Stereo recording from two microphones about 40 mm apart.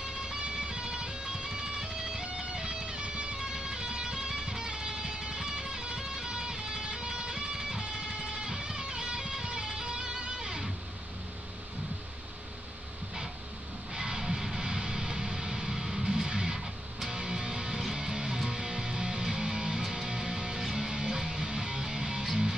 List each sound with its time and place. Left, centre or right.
0.6 s music: right
13.9 s music: centre